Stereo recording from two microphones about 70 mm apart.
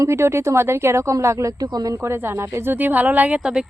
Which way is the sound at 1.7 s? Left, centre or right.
Right.